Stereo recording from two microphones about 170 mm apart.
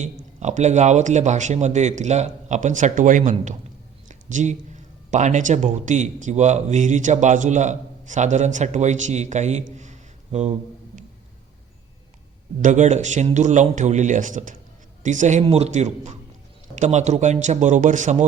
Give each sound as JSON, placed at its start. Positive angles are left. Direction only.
{"t": 0.0, "sound": "a man's voice", "side_deg": -45}
{"t": 12.6, "sound": "a man's voice", "side_deg": -45}